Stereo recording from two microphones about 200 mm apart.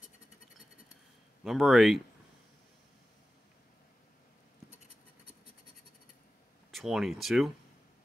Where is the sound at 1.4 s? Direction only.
Centre (ahead or behind).